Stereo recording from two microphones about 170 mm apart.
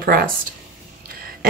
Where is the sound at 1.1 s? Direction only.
60° right (ahead or behind).